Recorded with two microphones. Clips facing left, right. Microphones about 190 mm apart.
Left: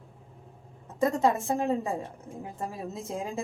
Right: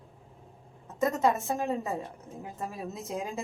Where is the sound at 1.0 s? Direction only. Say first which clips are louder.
Left 2 dB; 30° left (ahead or behind).